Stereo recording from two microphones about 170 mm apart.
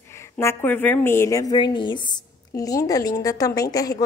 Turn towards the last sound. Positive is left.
turn(degrees=20)  # may be behind; listen again after turning